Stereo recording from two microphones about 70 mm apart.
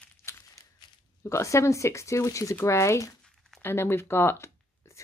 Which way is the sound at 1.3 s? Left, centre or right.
Left.